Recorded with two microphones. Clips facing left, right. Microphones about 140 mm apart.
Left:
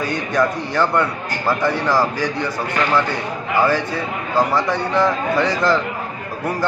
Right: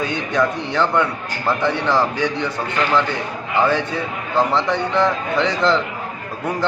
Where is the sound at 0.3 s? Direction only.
10° left (ahead or behind).